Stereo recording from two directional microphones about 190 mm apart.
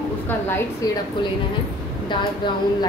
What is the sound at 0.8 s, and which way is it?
Speech, 15° left (ahead or behind).